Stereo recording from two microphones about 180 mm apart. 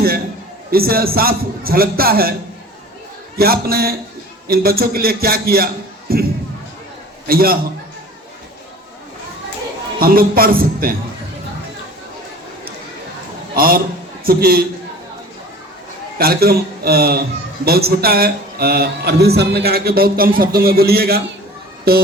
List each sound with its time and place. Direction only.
0.7 s a man's voice: 55° right (ahead or behind)
3.3 s a man's voice: 60° right (ahead or behind)
7.3 s a man's voice: 55° right (ahead or behind)
10.0 s a man's voice: 55° right (ahead or behind)
13.6 s a man's voice: 55° right (ahead or behind)
16.1 s a man's voice: 60° right (ahead or behind)